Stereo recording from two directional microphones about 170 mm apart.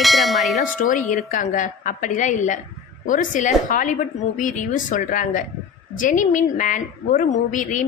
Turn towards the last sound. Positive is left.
turn(degrees=50)  # may be behind; listen again after turning